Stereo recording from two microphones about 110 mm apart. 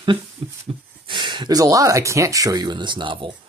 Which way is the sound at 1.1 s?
45° right (ahead or behind).